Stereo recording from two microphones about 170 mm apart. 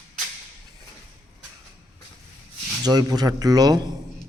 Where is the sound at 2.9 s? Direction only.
25° right (ahead or behind).